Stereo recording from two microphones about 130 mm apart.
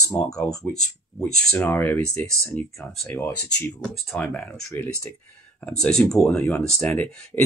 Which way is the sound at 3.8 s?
5° left (ahead or behind).